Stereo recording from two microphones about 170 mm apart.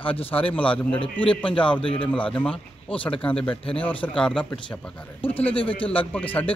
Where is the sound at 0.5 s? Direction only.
5° left (ahead or behind).